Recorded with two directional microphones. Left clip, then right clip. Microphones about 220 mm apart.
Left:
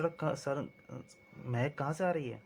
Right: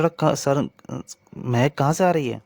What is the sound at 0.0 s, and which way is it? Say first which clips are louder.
Speech: right 14 dB; 50° right (ahead or behind).